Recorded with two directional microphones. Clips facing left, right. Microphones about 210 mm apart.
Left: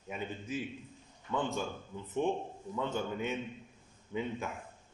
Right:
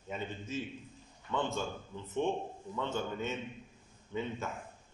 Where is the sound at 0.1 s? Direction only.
10° left (ahead or behind).